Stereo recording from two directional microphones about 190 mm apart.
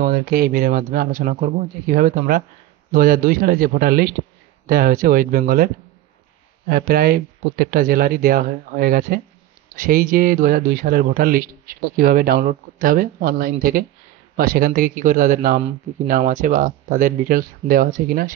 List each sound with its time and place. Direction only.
0.0 s speech: 50° right (ahead or behind)
6.7 s speech: 50° right (ahead or behind)